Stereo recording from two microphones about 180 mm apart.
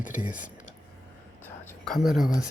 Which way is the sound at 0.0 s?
10° right (ahead or behind).